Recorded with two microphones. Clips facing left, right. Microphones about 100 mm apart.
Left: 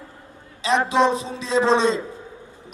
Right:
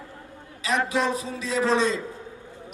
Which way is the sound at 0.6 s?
25° left (ahead or behind).